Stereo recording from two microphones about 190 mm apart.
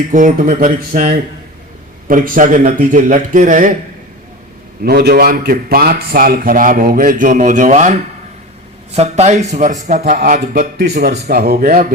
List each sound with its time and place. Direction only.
0.1 s a man's voice: 45° right (ahead or behind)
4.8 s a man's voice: 55° right (ahead or behind)
9.0 s a man's voice: 35° right (ahead or behind); by 11.9 s 50° right (ahead or behind)